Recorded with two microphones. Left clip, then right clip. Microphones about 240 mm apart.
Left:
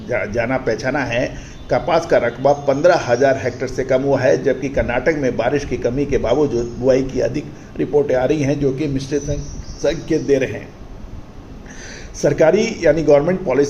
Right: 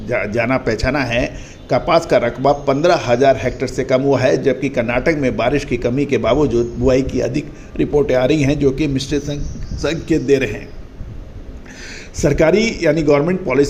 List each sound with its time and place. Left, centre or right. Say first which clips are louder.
0.3 s a man's voice: right 2 dB; right
12.1 s a man's voice: even; right